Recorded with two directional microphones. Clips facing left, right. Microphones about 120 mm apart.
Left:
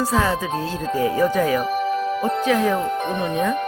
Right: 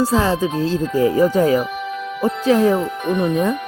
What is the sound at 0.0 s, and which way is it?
Speech, 30° right (ahead or behind).